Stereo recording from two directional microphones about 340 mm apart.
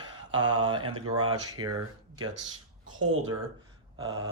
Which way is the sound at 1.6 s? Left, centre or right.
Right.